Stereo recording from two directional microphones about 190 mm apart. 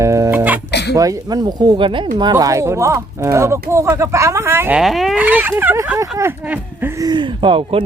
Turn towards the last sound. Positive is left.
turn(degrees=-25)  # may be behind; listen again after turning